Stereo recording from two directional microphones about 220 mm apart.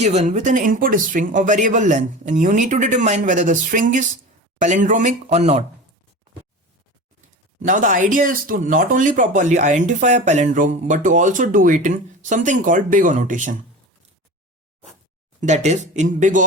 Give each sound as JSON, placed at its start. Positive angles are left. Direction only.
{"t": 0.0, "sound": "speech", "side_deg": -30}
{"t": 7.6, "sound": "speech", "side_deg": -35}
{"t": 15.4, "sound": "speech", "side_deg": -30}